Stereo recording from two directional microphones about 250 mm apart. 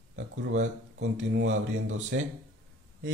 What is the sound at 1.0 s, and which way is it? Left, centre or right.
Speech, right.